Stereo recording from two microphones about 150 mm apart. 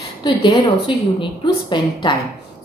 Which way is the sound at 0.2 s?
30° left (ahead or behind).